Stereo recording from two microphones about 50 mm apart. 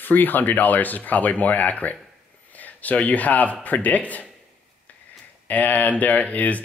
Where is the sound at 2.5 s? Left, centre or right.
Left.